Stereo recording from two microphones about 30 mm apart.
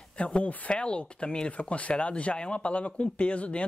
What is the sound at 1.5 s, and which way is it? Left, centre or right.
Speech, left.